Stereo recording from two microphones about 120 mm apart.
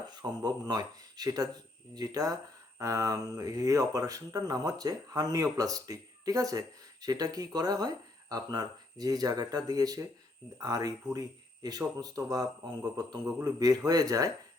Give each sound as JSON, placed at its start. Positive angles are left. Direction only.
{"t": 0.1, "sound": "speech", "side_deg": -35}